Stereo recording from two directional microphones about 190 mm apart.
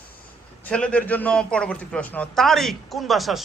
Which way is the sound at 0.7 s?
5° left (ahead or behind).